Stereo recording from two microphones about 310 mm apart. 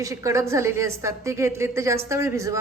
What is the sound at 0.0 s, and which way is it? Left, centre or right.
A woman's voice, centre.